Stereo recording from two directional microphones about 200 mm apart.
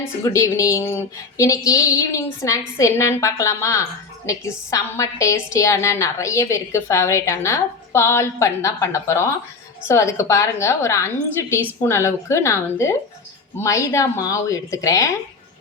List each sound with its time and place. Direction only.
0.3 s a woman's voice: 15° left (ahead or behind)